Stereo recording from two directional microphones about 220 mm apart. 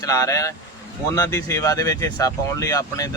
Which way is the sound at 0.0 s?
15° left (ahead or behind).